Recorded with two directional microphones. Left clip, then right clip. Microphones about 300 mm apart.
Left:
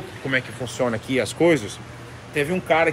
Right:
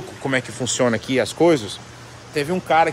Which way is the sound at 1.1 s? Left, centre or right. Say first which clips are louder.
Right 1 dB; centre.